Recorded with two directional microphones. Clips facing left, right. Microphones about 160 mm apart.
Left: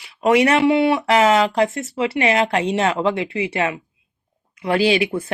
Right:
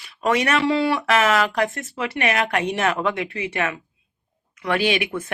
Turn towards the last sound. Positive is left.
turn(degrees=30)  # may be behind; listen again after turning